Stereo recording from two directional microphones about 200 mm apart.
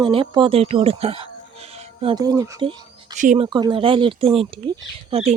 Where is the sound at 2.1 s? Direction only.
15° right (ahead or behind).